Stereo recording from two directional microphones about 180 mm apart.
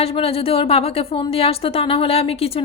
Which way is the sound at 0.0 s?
30° left (ahead or behind).